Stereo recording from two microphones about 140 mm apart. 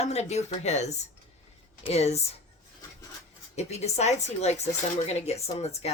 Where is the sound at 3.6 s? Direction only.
50° left (ahead or behind).